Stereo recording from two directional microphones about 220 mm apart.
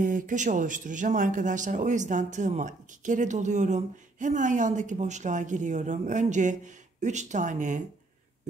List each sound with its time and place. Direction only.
0.0 s speech: 35° right (ahead or behind)